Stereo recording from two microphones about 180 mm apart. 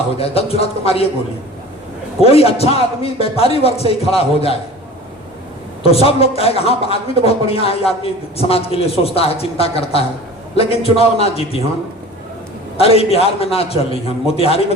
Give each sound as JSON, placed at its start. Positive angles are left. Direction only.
{"t": 0.2, "sound": "a man's voice", "side_deg": 35}
{"t": 2.2, "sound": "a man's voice", "side_deg": 35}
{"t": 5.8, "sound": "a man's voice", "side_deg": 35}
{"t": 12.8, "sound": "a man's voice", "side_deg": 35}